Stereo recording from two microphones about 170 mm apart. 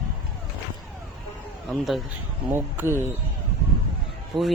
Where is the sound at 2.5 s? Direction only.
15° right (ahead or behind).